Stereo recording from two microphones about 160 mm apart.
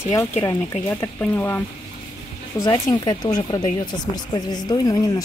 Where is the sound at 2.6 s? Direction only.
20° left (ahead or behind).